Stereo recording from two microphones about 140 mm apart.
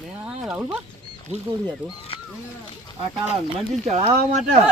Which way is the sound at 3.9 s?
50° right (ahead or behind).